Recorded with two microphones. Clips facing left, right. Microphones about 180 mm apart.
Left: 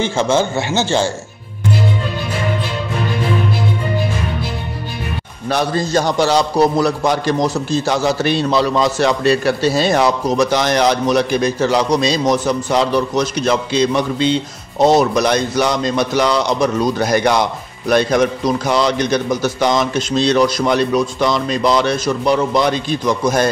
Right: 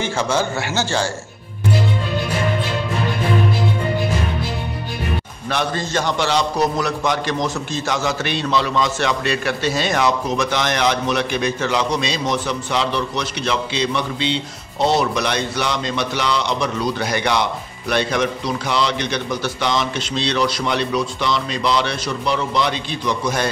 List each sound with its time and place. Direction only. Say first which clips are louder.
0.0 s speech: left 5 dB; 25° left (ahead or behind)
5.5 s a man's voice: left 5 dB; 35° left (ahead or behind)